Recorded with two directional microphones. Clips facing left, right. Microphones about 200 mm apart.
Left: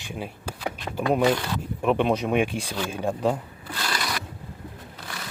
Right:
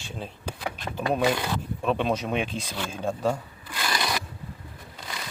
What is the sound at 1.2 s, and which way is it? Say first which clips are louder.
Speech: left 2 dB; 10° right (ahead or behind).